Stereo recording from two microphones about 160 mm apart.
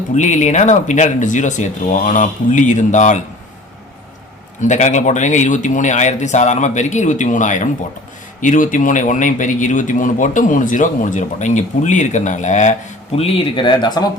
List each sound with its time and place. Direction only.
0.1 s speech: 50° left (ahead or behind)
4.6 s speech: 50° left (ahead or behind)
13.1 s speech: 35° left (ahead or behind)